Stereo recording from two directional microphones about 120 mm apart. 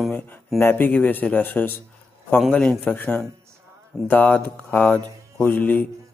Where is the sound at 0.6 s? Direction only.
15° left (ahead or behind).